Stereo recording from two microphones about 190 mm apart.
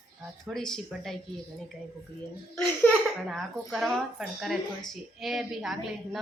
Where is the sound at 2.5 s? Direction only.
5° left (ahead or behind).